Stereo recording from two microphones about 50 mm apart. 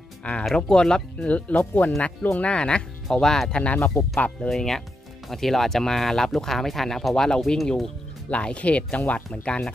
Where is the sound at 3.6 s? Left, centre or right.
Left.